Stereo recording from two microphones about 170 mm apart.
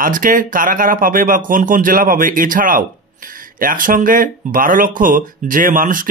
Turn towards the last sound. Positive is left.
turn(degrees=-55)  # may be behind; listen again after turning